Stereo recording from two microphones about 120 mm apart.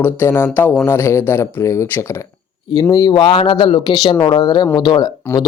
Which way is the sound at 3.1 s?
45° left (ahead or behind).